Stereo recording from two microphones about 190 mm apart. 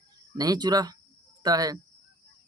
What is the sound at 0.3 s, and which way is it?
Speech, 20° right (ahead or behind).